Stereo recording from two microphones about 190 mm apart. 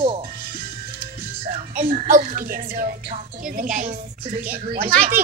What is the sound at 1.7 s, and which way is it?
A child's voice, 45° right (ahead or behind).